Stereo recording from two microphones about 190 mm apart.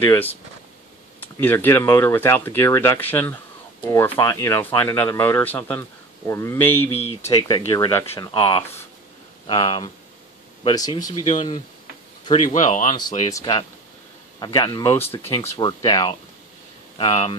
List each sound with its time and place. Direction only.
0.0 s speech: 10° left (ahead or behind)
1.3 s speech: 10° left (ahead or behind)
6.8 s speech: 30° left (ahead or behind)
7.2 s speech: 15° left (ahead or behind)
7.9 s speech: 10° left (ahead or behind)
8.3 s speech: 25° left (ahead or behind)
12.5 s speech: 40° left (ahead or behind)
13.3 s speech: 20° left (ahead or behind)